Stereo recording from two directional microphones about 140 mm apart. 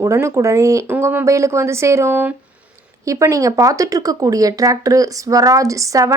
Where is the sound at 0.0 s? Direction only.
20° right (ahead or behind).